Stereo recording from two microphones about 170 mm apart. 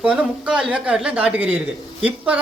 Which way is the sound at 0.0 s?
5° right (ahead or behind).